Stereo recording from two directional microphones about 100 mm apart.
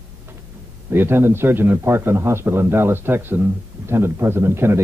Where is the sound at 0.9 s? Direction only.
20° right (ahead or behind).